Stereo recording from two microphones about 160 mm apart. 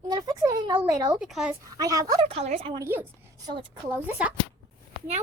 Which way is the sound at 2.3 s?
40° right (ahead or behind).